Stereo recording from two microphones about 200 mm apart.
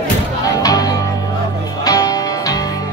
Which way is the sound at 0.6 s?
20° left (ahead or behind).